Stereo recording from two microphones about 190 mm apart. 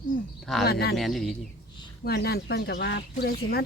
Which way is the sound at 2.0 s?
55° left (ahead or behind).